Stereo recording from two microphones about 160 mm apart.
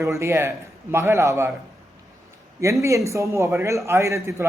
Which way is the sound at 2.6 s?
20° right (ahead or behind).